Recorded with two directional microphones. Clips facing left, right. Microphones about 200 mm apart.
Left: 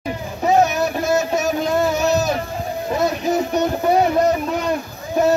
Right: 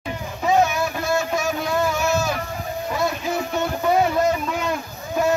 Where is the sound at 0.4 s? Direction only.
40° left (ahead or behind).